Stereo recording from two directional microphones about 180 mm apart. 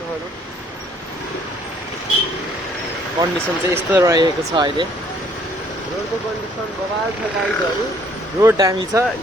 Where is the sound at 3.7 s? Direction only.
10° right (ahead or behind).